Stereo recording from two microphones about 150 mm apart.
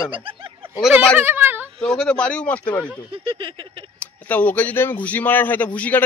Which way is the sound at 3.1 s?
35° right (ahead or behind).